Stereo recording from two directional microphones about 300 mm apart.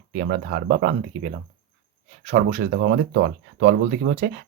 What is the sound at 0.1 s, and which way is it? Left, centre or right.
Speech, right.